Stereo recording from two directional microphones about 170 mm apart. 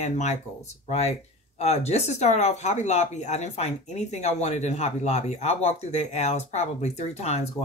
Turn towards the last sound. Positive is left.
turn(degrees=40)  # may be behind; listen again after turning